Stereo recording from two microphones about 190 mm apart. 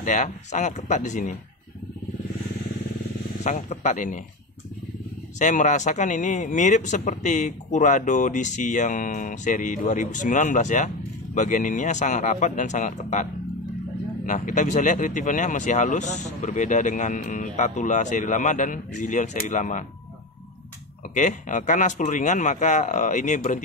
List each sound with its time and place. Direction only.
0.0 s speech: 40° left (ahead or behind)
3.4 s speech: 35° left (ahead or behind)
5.4 s speech: 40° left (ahead or behind)
21.1 s speech: 40° left (ahead or behind)